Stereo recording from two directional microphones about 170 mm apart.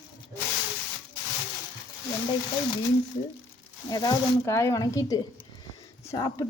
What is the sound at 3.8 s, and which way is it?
Speech, 20° left (ahead or behind).